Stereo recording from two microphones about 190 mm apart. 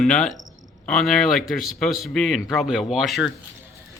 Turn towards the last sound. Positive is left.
turn(degrees=0)  # may be behind; listen again after turning